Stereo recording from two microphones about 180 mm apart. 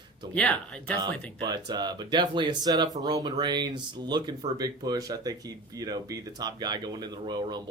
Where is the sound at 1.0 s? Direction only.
25° right (ahead or behind).